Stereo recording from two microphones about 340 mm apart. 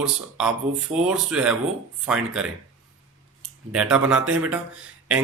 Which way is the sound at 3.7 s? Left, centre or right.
Centre.